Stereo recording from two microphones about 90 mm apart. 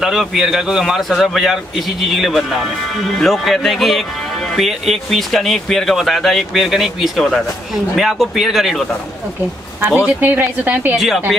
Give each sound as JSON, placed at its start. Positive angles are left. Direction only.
{"t": 0.0, "sound": "a man's voice", "side_deg": -5}
{"t": 10.0, "sound": "a woman's voice", "side_deg": -20}